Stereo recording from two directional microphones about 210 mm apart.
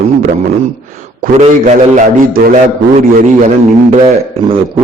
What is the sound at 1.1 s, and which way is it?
A man's voice, 35° right (ahead or behind).